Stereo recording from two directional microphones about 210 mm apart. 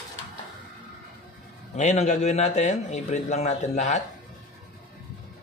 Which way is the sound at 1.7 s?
35° left (ahead or behind).